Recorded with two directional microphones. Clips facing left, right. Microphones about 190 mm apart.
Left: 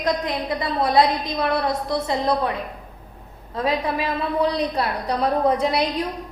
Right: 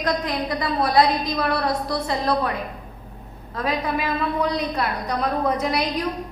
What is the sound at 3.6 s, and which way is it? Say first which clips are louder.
A woman's voice: left 2 dB; 30° left (ahead or behind).